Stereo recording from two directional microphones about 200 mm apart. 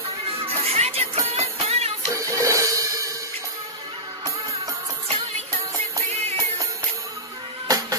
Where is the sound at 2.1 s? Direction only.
15° right (ahead or behind).